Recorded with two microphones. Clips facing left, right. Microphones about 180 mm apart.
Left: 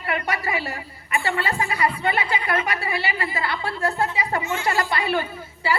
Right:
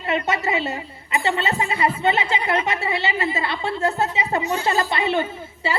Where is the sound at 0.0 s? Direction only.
25° right (ahead or behind).